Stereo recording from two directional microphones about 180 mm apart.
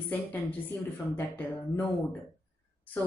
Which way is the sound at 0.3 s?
10° left (ahead or behind).